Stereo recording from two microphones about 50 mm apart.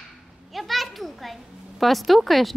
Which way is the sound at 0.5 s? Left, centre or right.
Centre.